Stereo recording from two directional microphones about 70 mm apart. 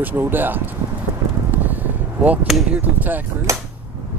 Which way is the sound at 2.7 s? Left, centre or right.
Right.